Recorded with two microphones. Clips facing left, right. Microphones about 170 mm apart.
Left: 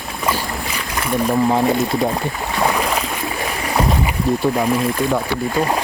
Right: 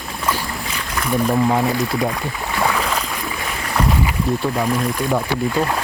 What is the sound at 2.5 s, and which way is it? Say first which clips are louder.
Boat: left 1 dB; 15° left (ahead or behind).